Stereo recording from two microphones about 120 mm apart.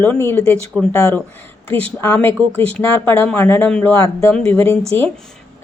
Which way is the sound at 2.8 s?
20° left (ahead or behind).